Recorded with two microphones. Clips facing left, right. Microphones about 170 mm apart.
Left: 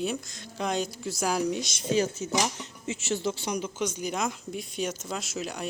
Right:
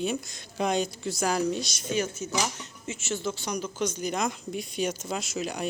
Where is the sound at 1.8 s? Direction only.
35° left (ahead or behind).